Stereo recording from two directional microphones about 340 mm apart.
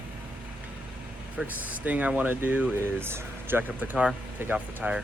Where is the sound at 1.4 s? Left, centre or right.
Centre.